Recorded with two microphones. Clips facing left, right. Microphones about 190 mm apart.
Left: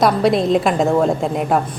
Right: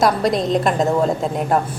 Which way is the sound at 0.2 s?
5° left (ahead or behind).